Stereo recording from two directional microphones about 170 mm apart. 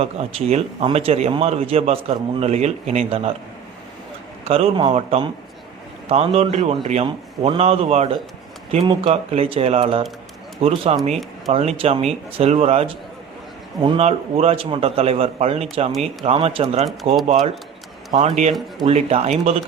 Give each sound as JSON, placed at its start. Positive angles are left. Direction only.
{"t": 0.0, "sound": "a man's voice", "side_deg": -35}
{"t": 4.4, "sound": "a man's voice", "side_deg": -35}
{"t": 18.9, "sound": "a man's voice", "side_deg": -40}